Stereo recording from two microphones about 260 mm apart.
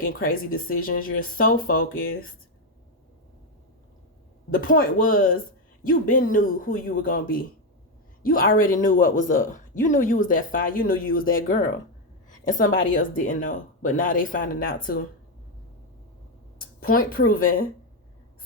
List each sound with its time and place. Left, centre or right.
0.0 s speech: left
4.5 s speech: left
16.6 s a woman's voice: left